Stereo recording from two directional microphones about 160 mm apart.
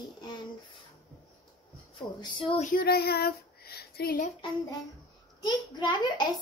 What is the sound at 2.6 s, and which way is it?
Child singing, 60° left (ahead or behind).